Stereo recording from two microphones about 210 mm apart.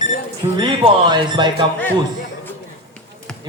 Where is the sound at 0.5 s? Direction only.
20° right (ahead or behind).